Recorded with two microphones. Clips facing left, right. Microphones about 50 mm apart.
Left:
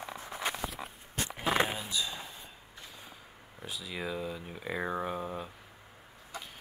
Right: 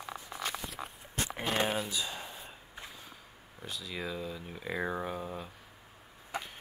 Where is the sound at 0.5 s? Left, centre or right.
Centre.